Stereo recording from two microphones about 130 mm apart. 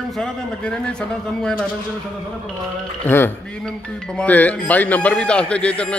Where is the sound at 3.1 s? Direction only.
15° left (ahead or behind).